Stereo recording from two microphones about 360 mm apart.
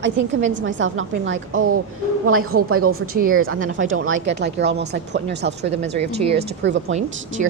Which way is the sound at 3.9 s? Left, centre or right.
Right.